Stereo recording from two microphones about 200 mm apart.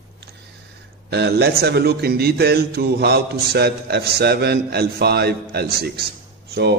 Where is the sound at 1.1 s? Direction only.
55° right (ahead or behind).